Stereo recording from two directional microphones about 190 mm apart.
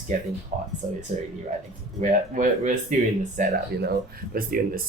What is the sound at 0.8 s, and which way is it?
Speech, 45° right (ahead or behind).